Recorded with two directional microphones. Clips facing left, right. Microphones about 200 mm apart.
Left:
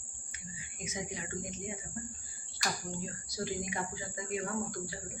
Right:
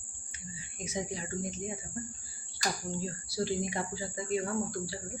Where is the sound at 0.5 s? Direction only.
35° right (ahead or behind).